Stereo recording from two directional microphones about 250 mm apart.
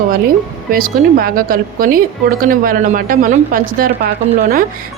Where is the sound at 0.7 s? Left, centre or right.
Right.